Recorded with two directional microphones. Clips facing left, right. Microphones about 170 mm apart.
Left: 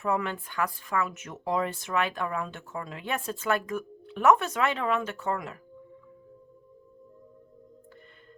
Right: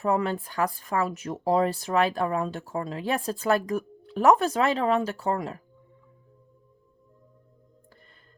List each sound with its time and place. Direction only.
0.0 s speech: 35° right (ahead or behind)